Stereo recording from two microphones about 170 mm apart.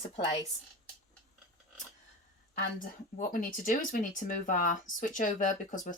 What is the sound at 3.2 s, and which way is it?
Speech, 50° left (ahead or behind).